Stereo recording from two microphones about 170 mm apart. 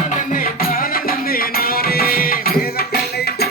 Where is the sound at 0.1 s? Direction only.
55° left (ahead or behind).